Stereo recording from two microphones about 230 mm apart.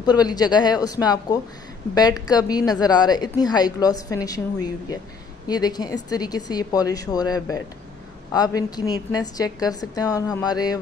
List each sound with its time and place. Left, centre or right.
0.0 s a woman's voice: centre